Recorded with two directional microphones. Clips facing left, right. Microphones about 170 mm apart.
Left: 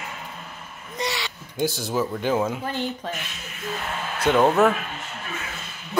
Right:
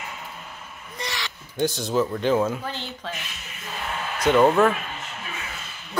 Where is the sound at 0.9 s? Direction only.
20° left (ahead or behind).